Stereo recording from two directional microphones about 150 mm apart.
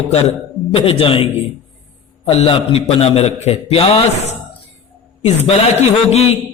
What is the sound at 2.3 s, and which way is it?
A man's voice, 40° left (ahead or behind).